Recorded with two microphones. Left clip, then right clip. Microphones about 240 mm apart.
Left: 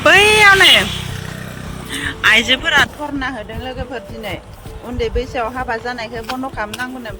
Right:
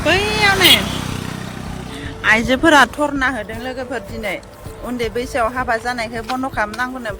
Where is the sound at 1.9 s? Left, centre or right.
Centre.